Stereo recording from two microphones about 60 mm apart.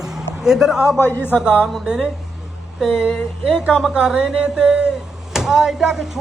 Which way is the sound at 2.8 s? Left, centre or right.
Centre.